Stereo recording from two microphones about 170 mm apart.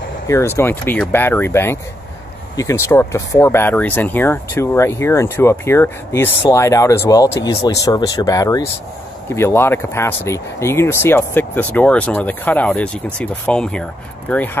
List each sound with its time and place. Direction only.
0.3 s speech: 15° left (ahead or behind)